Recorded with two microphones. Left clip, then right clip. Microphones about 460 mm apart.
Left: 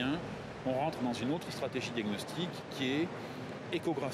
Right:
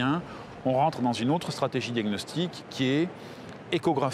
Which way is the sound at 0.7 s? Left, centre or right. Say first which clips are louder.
Right 10 dB; right.